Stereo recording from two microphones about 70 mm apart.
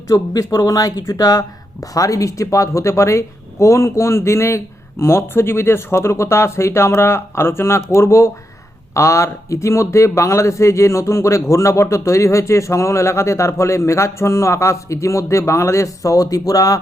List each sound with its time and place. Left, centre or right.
0.1 s speech: left